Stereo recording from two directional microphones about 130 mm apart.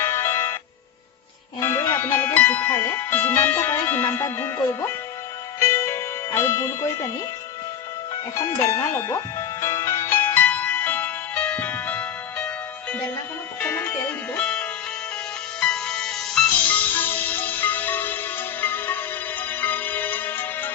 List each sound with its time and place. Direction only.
0.0 s music: 15° left (ahead or behind)
1.6 s speech: 20° left (ahead or behind)
5.5 s music: 20° left (ahead or behind)
8.4 s music: 20° left (ahead or behind)
13.6 s music: 10° left (ahead or behind)